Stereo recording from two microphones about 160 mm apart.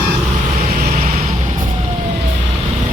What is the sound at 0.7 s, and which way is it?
Vehicle, 60° right (ahead or behind).